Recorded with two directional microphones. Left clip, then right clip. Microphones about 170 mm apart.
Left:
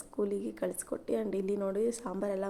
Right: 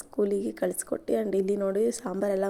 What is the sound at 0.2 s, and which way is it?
A woman's voice, 30° right (ahead or behind).